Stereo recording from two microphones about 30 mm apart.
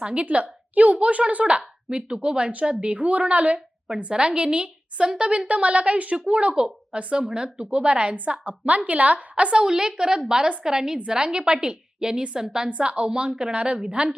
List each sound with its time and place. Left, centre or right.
0.0 s speech: right
0.7 s a woman's voice: right
1.9 s a woman's voice: right
4.1 s a woman's voice: right
5.5 s a woman's voice: right
7.7 s speech: right
8.1 s a woman's voice: right
9.6 s a woman's voice: right
12.6 s a woman's voice: right
13.1 s speech: right